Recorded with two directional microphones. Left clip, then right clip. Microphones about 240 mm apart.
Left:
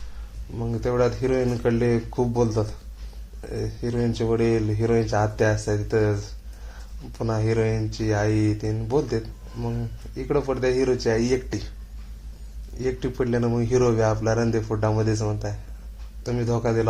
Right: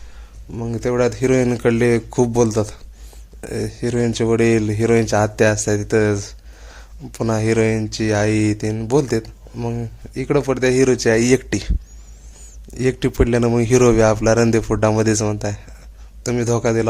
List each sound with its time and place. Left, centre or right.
0.5 s speech: right
12.7 s speech: right